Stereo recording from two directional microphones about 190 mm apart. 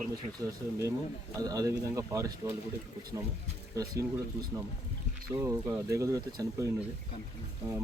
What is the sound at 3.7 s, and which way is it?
Speech, 15° right (ahead or behind).